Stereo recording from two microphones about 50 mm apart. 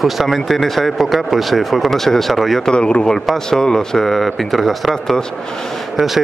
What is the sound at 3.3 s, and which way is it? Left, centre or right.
Speech, centre.